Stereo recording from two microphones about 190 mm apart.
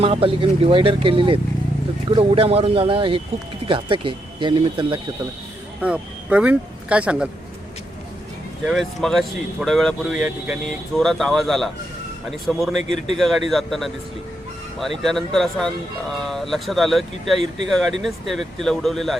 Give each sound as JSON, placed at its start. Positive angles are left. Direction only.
{"t": 0.0, "sound": "speech", "side_deg": -30}
{"t": 5.8, "sound": "speech", "side_deg": -5}
{"t": 8.6, "sound": "speech", "side_deg": 0}